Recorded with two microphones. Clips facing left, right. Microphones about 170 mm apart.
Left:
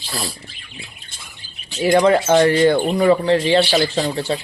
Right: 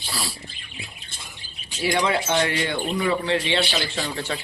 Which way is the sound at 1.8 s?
40° left (ahead or behind).